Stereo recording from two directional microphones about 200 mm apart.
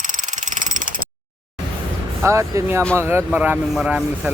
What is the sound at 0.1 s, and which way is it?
Mechanisms, 40° right (ahead or behind).